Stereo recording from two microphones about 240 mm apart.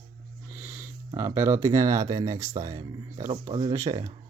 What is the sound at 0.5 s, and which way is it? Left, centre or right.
Speech, centre.